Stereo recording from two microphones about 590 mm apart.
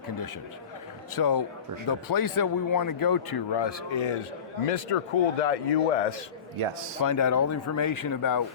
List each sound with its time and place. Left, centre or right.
1.1 s speech: left
4.6 s a man's voice: left
7.0 s speech: left